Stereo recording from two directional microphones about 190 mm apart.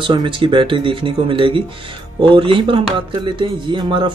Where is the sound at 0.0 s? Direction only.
25° right (ahead or behind).